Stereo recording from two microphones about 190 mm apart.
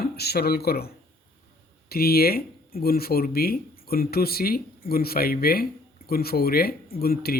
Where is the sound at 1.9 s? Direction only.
55° left (ahead or behind).